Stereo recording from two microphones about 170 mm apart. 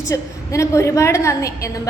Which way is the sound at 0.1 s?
20° left (ahead or behind).